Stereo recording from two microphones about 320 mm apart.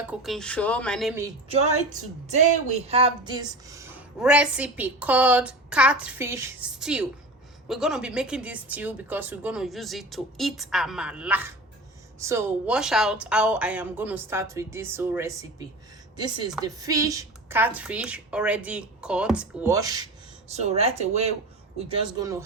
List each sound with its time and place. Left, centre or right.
0.1 s speech: centre
1.5 s a woman's voice: right